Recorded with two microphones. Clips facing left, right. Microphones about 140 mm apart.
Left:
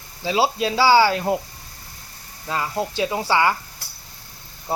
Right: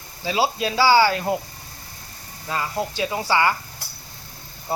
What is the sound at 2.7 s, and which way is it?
Speech, 20° left (ahead or behind).